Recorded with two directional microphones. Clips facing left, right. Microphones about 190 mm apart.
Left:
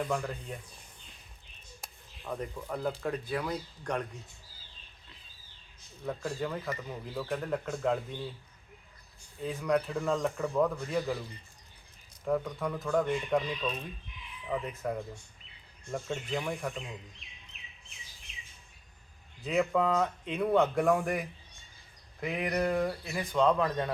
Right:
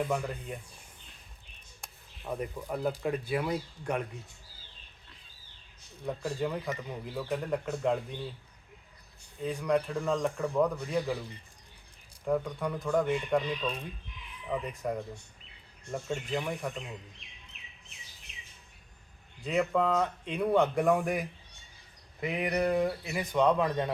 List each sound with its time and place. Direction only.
0.0 s speech: 5° right (ahead or behind)
2.2 s speech: 10° right (ahead or behind)
6.1 s speech: 5° right (ahead or behind)
9.4 s speech: centre (ahead or behind)
12.2 s speech: centre (ahead or behind)
19.5 s speech: centre (ahead or behind)
23.1 s speech: 15° right (ahead or behind)